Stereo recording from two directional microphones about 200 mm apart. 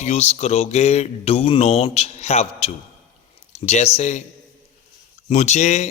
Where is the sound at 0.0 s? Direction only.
35° left (ahead or behind).